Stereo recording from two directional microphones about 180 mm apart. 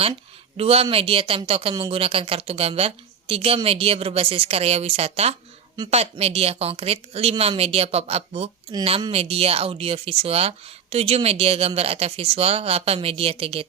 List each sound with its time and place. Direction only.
0.0 s speech: 35° right (ahead or behind)